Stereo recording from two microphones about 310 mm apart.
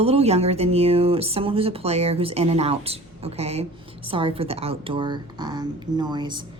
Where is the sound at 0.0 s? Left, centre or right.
Centre.